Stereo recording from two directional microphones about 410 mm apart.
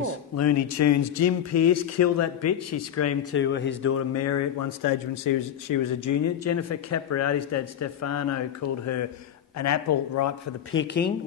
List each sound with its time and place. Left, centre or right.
0.4 s speech: left
10.7 s speech: left